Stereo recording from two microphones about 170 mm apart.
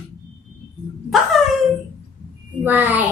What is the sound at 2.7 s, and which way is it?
Speech, 10° right (ahead or behind).